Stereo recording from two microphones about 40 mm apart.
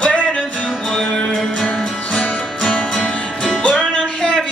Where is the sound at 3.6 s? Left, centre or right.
Left.